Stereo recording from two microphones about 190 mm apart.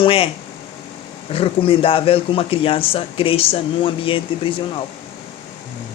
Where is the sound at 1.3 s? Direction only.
30° left (ahead or behind).